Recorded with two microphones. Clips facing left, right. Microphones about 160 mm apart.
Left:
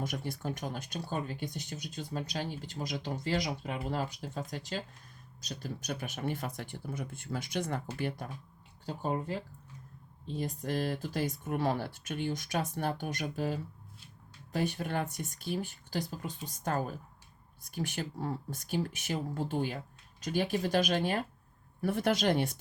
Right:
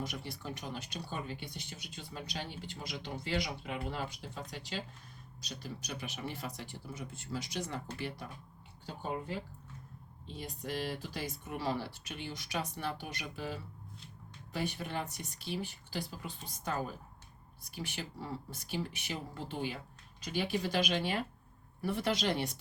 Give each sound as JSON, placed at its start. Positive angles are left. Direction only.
{"t": 0.0, "sound": "speech", "side_deg": 50}
{"t": 8.9, "sound": "speech", "side_deg": 40}